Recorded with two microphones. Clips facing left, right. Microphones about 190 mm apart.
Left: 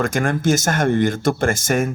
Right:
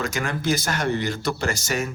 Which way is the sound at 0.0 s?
50° left (ahead or behind).